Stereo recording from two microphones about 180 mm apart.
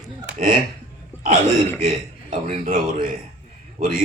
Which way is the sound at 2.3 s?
45° right (ahead or behind).